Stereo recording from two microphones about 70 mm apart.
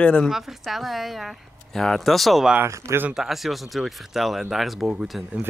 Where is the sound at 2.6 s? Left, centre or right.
Right.